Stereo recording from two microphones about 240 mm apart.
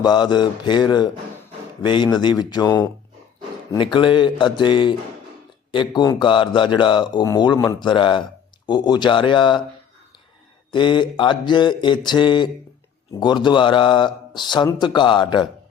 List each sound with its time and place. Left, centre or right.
0.0 s a sound: centre
3.9 s a man's voice: centre
10.7 s a man's voice: centre